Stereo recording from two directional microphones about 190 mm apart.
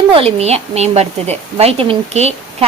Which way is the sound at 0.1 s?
30° right (ahead or behind).